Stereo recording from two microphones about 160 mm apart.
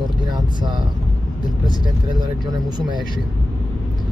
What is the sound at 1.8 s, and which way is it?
Speech, 30° right (ahead or behind).